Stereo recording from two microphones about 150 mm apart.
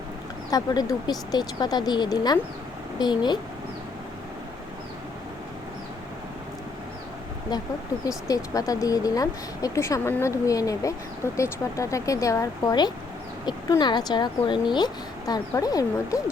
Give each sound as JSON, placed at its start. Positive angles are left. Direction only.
{"t": 0.5, "sound": "speech", "side_deg": 25}
{"t": 7.5, "sound": "speech", "side_deg": 25}